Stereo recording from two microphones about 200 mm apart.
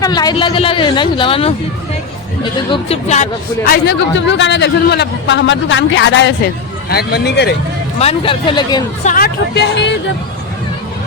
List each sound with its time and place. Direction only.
0.0 s speech: 20° left (ahead or behind)
3.7 s a man's voice: 60° left (ahead or behind)
7.9 s speech: 30° left (ahead or behind)
9.0 s a man's voice: 50° left (ahead or behind)